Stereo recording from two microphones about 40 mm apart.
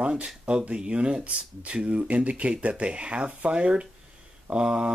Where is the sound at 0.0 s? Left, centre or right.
Right.